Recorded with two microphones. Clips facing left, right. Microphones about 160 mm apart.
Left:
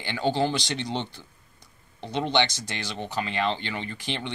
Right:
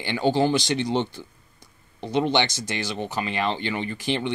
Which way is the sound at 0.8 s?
50° right (ahead or behind).